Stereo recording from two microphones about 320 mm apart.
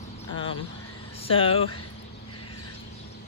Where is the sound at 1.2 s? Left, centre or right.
Centre.